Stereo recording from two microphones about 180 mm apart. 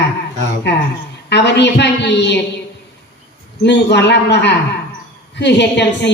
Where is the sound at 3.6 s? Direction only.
75° left (ahead or behind).